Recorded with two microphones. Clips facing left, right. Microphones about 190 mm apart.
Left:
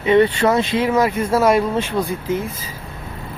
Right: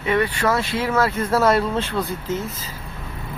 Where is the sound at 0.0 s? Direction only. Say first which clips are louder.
Left 6 dB; 25° left (ahead or behind).